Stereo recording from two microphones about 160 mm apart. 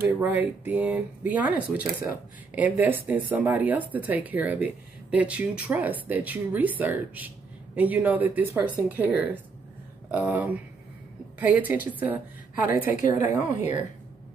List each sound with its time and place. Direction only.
0.4 s speech: 10° right (ahead or behind)
2.5 s a woman's voice: 10° right (ahead or behind)